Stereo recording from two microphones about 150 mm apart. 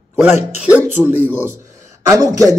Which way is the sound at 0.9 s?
10° right (ahead or behind).